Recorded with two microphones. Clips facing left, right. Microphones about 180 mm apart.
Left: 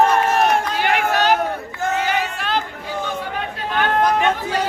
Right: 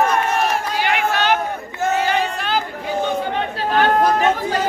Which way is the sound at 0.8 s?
45° left (ahead or behind).